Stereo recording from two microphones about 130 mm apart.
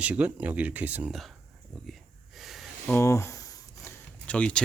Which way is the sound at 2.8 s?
20° left (ahead or behind).